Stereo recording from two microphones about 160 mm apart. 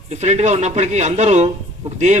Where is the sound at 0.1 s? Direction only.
45° right (ahead or behind).